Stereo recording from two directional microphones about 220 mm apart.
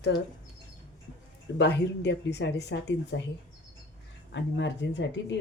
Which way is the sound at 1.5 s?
50° left (ahead or behind).